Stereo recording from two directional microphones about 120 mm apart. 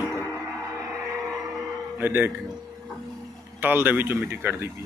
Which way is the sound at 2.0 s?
15° right (ahead or behind).